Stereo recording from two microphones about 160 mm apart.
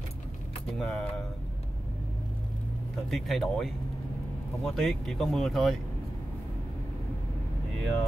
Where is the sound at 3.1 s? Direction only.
Centre (ahead or behind).